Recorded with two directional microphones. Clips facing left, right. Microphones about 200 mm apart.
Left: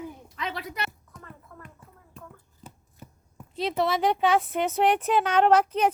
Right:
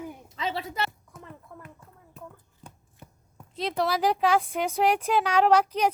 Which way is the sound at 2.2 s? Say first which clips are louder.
Right 2 dB; 5° left (ahead or behind).